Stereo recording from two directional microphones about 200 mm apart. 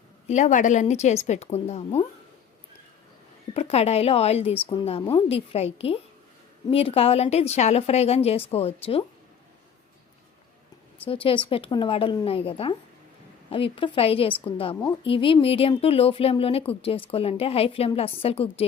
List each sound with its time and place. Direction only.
0.3 s a woman's voice: 35° left (ahead or behind)
3.5 s a woman's voice: 30° left (ahead or behind)
11.0 s a woman's voice: 25° left (ahead or behind)